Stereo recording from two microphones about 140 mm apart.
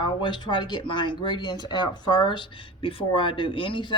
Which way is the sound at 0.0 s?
35° left (ahead or behind).